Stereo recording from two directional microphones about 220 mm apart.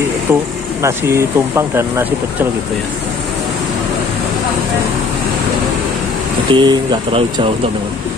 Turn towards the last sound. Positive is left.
turn(degrees=-25)  # may be behind; listen again after turning